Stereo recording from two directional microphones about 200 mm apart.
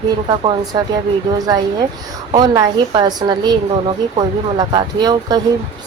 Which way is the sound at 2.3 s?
20° right (ahead or behind).